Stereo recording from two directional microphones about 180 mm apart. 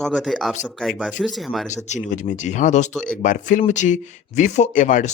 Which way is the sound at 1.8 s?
40° left (ahead or behind).